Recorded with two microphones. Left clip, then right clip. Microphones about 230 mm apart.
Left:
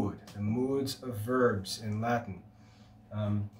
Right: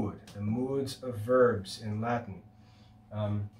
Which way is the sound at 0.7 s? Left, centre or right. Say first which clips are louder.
Even; centre.